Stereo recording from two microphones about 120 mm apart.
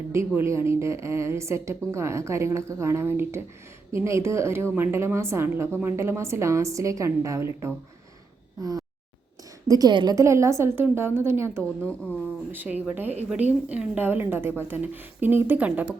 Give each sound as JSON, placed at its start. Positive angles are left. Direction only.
{"t": 0.1, "sound": "a woman's voice", "side_deg": -20}
{"t": 9.6, "sound": "a woman's voice", "side_deg": -30}
{"t": 11.6, "sound": "speech", "side_deg": 10}
{"t": 12.5, "sound": "a woman's voice", "side_deg": -15}